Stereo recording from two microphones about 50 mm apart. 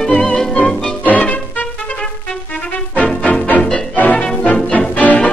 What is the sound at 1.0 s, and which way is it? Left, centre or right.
Music, left.